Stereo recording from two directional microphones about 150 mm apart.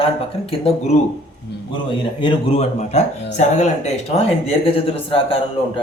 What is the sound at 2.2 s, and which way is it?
Speech, 35° left (ahead or behind).